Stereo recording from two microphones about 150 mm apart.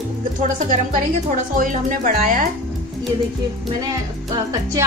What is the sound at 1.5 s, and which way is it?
Speech, 65° right (ahead or behind).